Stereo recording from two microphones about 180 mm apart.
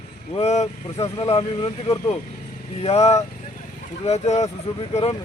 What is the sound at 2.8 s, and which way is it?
Speech, 35° left (ahead or behind).